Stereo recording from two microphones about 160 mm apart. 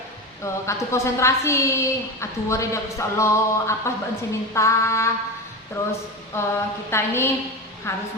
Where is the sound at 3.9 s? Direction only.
15° left (ahead or behind).